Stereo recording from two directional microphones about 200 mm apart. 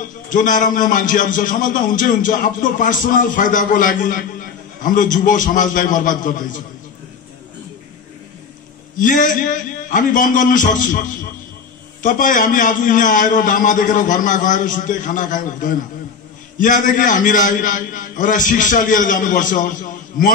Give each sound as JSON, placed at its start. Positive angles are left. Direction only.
{"t": 0.3, "sound": "a man's voice", "side_deg": 40}
{"t": 8.9, "sound": "a man's voice", "side_deg": 40}